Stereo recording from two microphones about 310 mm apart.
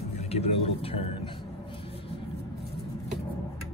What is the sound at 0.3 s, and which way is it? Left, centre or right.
Speech, centre.